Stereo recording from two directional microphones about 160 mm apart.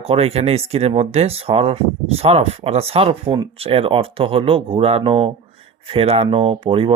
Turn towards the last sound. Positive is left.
turn(degrees=-35)  # may be behind; listen again after turning